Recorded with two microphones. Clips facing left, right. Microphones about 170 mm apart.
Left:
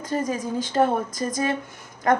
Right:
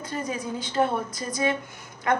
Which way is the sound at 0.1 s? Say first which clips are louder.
Left 6 dB; 45° left (ahead or behind).